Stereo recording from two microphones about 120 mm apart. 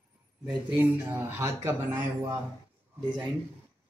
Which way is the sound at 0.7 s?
15° right (ahead or behind).